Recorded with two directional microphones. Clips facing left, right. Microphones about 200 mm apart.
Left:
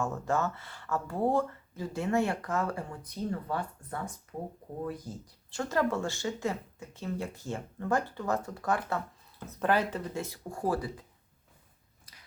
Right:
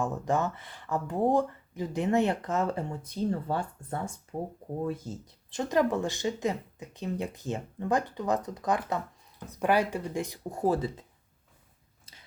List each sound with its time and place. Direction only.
0.0 s speech: 15° right (ahead or behind)